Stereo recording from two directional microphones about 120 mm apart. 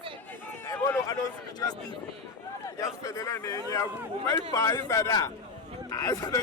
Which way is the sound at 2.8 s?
30° left (ahead or behind).